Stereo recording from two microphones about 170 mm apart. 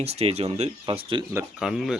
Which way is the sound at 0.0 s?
35° right (ahead or behind).